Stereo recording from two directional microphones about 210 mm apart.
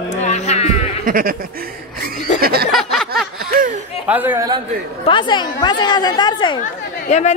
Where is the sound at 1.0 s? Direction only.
40° right (ahead or behind).